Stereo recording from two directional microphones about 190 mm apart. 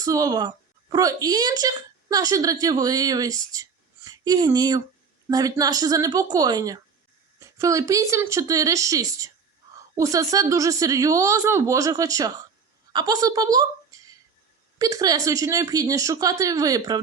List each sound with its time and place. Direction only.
0.0 s a woman's voice: 20° right (ahead or behind)